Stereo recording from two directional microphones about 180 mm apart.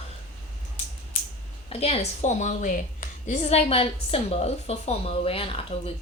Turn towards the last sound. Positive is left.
turn(degrees=30)  # may be behind; listen again after turning